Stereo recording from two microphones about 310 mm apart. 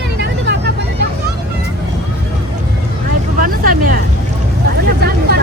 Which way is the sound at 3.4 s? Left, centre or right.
Right.